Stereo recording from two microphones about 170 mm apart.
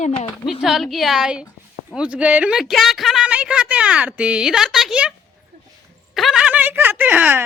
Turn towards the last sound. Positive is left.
turn(degrees=-10)  # may be behind; listen again after turning